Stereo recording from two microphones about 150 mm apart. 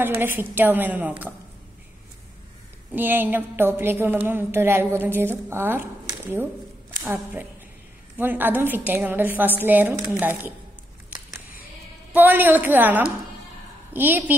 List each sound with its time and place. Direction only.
0.4 s a woman's voice: 15° right (ahead or behind)
2.9 s a woman's voice: 15° right (ahead or behind)
12.1 s a woman's voice: 15° right (ahead or behind)